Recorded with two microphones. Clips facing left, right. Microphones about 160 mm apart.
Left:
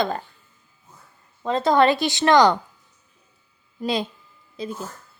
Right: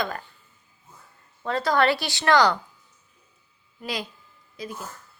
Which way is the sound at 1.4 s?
20° left (ahead or behind).